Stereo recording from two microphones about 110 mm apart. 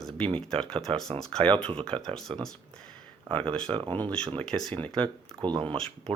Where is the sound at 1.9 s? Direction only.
60° right (ahead or behind).